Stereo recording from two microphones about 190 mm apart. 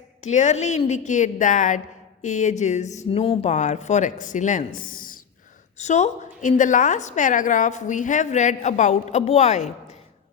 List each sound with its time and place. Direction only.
0.2 s a woman's voice: 40° left (ahead or behind)